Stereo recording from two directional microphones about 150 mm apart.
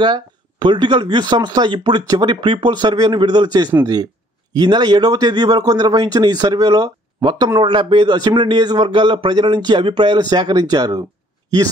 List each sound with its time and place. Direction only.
0.0 s speech: 30° right (ahead or behind)